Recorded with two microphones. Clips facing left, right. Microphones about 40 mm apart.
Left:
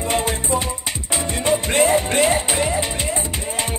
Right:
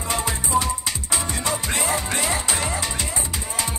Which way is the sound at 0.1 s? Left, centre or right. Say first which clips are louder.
Left 1 dB; left.